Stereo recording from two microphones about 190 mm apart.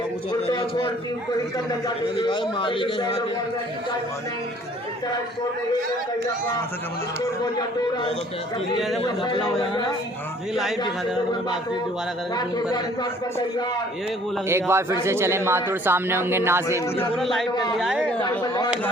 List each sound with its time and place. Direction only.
0.4 s a man's voice: 30° left (ahead or behind)
2.1 s a man's voice: 25° left (ahead or behind)
9.0 s a man's voice: 25° left (ahead or behind)
10.5 s a man's voice: centre (ahead or behind)
12.3 s a man's voice: 20° left (ahead or behind)
14.4 s speech: 15° right (ahead or behind)
17.2 s a man's voice: centre (ahead or behind)
18.2 s a man's voice: 20° left (ahead or behind)